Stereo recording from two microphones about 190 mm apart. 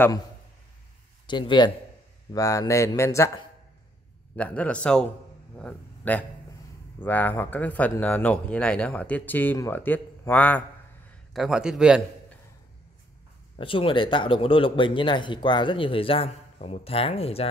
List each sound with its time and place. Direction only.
1.2 s speech: 25° left (ahead or behind)
4.4 s speech: 5° left (ahead or behind)
11.3 s a man's voice: 5° right (ahead or behind)
13.6 s speech: 25° left (ahead or behind)